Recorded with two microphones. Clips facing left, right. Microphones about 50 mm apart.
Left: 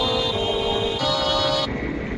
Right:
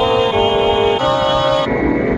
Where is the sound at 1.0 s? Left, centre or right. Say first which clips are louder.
Right 8 dB; right.